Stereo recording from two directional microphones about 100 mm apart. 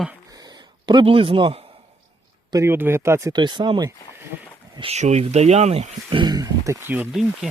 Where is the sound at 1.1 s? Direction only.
65° right (ahead or behind).